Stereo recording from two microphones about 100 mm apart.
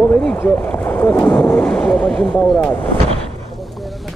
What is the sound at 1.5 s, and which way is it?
Speech, 10° left (ahead or behind).